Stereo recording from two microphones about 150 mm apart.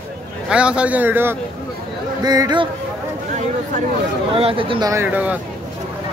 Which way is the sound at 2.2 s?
25° right (ahead or behind).